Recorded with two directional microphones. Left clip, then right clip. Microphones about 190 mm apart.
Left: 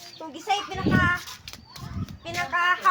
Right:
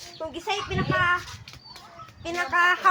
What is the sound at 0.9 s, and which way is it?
Speech, 20° right (ahead or behind).